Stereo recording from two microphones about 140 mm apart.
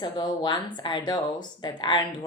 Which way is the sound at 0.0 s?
35° left (ahead or behind).